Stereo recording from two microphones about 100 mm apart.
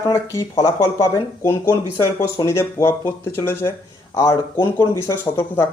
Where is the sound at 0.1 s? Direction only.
30° left (ahead or behind).